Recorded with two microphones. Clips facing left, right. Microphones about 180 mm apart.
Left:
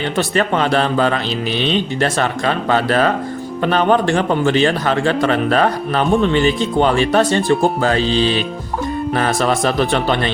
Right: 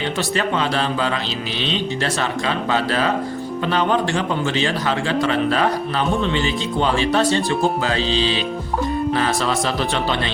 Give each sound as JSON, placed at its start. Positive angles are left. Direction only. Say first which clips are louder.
{"t": 0.2, "sound": "a man's voice", "louder": "left 6 dB", "side_deg": 55}